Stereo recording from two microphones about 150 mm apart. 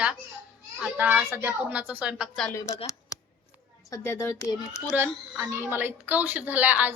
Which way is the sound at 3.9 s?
15° left (ahead or behind).